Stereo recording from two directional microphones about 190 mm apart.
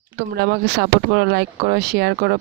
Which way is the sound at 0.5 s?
60° right (ahead or behind).